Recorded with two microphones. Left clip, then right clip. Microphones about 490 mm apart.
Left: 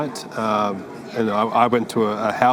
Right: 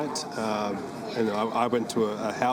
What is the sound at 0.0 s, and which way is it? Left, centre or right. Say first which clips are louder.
A man's voice: left 5 dB; left.